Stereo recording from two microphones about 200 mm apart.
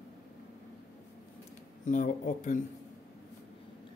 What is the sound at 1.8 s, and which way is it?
Speech, 40° left (ahead or behind).